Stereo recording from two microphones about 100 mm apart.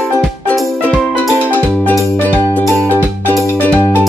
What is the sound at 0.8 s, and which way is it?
Music, 15° left (ahead or behind).